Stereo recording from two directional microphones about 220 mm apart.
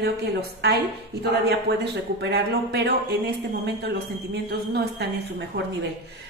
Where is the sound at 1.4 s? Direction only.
50° right (ahead or behind).